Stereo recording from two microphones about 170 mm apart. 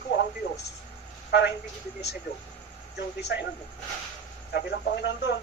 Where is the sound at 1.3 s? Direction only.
85° left.